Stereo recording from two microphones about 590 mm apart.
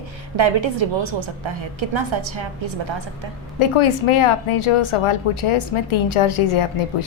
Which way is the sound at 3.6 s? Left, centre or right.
Left.